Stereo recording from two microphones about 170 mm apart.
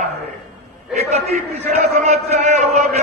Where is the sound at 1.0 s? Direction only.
40° right (ahead or behind).